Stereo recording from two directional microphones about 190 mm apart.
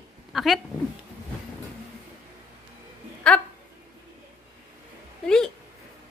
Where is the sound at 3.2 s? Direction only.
5° left (ahead or behind).